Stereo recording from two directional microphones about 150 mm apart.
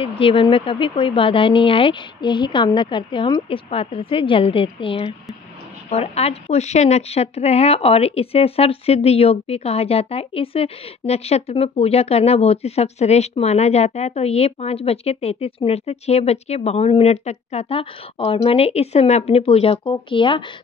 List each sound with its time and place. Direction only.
0.2 s speech: 35° left (ahead or behind)